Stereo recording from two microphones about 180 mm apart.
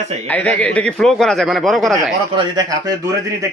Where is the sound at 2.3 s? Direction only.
20° right (ahead or behind).